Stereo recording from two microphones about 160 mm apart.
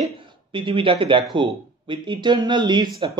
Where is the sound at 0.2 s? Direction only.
30° right (ahead or behind).